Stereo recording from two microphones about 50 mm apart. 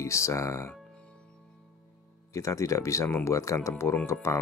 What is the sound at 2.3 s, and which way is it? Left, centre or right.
Speech, left.